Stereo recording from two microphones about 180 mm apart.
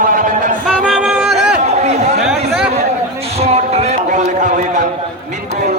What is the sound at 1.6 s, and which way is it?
Chatter, 40° right (ahead or behind).